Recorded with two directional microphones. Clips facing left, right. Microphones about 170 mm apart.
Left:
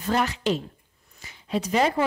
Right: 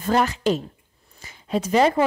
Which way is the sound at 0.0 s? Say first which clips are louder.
Right 4 dB; 45° right (ahead or behind).